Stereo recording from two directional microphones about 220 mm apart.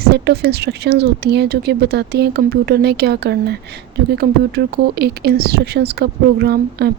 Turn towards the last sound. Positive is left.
turn(degrees=-50)  # may be behind; listen again after turning